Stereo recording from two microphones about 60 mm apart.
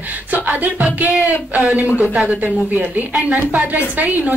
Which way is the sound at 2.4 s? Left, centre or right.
Right.